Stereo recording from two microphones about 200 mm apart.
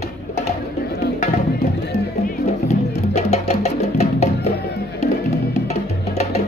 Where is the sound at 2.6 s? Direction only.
35° left (ahead or behind).